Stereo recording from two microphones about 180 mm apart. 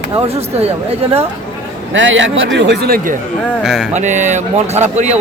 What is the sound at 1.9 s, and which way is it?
Speech, 90° right.